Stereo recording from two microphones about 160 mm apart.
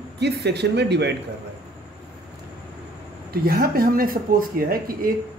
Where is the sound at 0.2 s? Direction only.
90° right.